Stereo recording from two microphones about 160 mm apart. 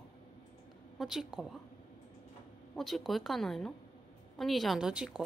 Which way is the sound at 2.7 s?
Centre (ahead or behind).